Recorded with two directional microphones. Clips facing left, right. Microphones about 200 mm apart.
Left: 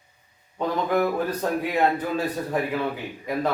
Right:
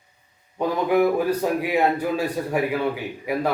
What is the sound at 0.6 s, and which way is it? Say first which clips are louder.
Speech: right 3 dB; 10° right (ahead or behind).